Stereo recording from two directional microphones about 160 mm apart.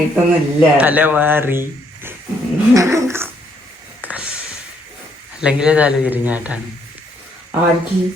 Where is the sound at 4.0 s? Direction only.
10° right (ahead or behind).